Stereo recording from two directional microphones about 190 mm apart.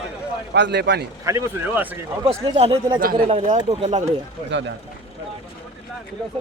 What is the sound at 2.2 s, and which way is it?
Speech, 30° right (ahead or behind).